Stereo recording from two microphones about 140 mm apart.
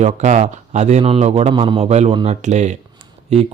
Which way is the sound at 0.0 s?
60° right (ahead or behind).